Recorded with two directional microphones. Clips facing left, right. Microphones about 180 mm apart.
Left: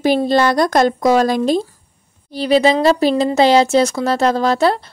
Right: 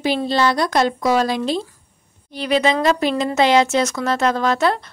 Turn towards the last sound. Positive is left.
turn(degrees=35)  # may be behind; listen again after turning